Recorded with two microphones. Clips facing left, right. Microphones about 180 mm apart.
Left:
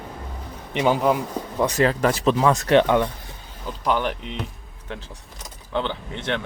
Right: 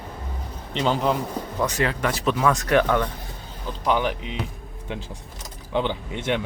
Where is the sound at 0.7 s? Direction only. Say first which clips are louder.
Left 3 dB; 10° left (ahead or behind).